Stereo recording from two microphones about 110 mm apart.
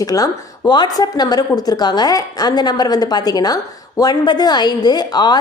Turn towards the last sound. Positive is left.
turn(degrees=40)  # may be behind; listen again after turning